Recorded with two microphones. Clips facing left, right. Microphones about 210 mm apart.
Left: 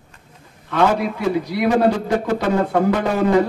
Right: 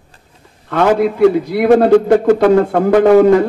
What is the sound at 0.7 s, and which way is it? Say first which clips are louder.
A man's voice: right 5 dB; 55° right (ahead or behind).